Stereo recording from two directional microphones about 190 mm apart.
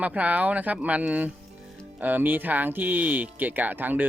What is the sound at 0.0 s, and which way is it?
Speech, 10° right (ahead or behind).